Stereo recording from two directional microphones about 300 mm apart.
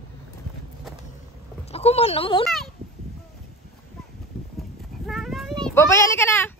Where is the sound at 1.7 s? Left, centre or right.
Centre.